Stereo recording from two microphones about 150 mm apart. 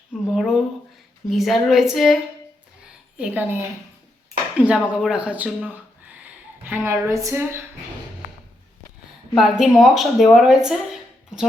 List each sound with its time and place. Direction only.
0.1 s speech: centre (ahead or behind)
3.2 s speech: 10° right (ahead or behind)
9.3 s speech: centre (ahead or behind)